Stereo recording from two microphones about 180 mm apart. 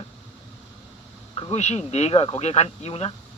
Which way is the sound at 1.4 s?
35° left (ahead or behind).